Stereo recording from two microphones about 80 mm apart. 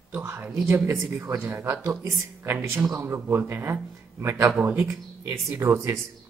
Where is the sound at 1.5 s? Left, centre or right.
Right.